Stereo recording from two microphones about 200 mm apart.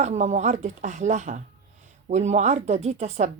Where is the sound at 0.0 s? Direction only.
35° right (ahead or behind).